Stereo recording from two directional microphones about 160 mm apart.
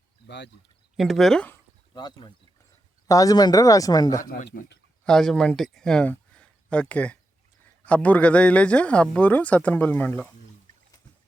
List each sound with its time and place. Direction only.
0.3 s speech: 90° left
0.9 s speech: centre (ahead or behind)
1.9 s speech: 25° left (ahead or behind)
4.2 s speech: 55° left (ahead or behind)
4.4 s speech: 90° left
5.0 s a man's voice: 5° left (ahead or behind)